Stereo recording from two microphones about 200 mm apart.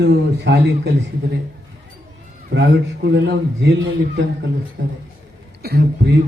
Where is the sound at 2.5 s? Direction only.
60° right (ahead or behind).